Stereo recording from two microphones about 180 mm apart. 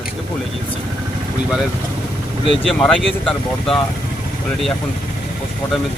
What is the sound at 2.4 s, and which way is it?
Speech, 30° left (ahead or behind).